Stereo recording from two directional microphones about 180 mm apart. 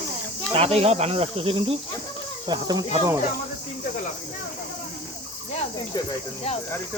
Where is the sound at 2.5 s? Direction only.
20° right (ahead or behind).